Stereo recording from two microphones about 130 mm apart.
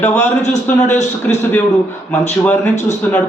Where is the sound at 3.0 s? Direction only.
15° left (ahead or behind).